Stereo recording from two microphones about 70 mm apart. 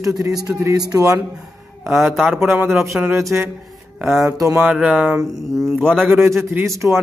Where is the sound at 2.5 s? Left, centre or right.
Right.